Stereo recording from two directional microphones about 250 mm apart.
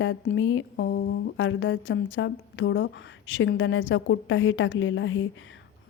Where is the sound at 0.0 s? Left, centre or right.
Left.